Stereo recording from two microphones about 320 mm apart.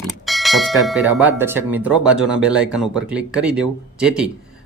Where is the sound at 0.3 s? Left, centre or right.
Centre.